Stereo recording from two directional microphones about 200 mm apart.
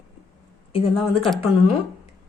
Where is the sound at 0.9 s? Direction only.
Centre (ahead or behind).